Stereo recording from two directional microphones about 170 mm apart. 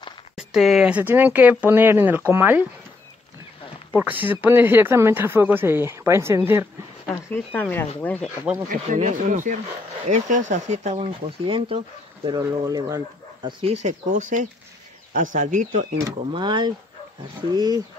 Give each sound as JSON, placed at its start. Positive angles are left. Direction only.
{"t": 0.4, "sound": "speech", "side_deg": 0}
{"t": 3.9, "sound": "speech", "side_deg": -10}
{"t": 7.2, "sound": "speech", "side_deg": 10}
{"t": 8.8, "sound": "speech", "side_deg": -45}
{"t": 13.8, "sound": "speech", "side_deg": -45}
{"t": 16.3, "sound": "speech", "side_deg": -25}